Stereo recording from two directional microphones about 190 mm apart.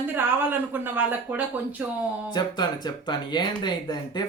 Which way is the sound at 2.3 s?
20° left (ahead or behind).